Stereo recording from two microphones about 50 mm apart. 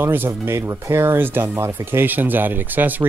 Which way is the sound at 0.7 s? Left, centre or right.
Right.